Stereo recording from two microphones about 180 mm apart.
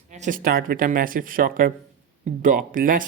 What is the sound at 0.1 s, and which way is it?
Speech, 45° right (ahead or behind).